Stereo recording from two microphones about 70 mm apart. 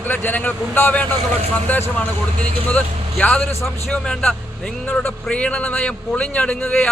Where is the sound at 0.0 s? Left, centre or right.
Left.